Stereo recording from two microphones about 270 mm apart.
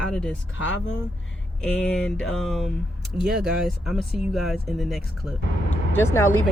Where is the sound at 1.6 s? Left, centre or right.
Centre.